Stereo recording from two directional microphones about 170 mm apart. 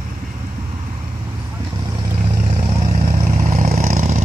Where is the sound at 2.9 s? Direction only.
50° right (ahead or behind).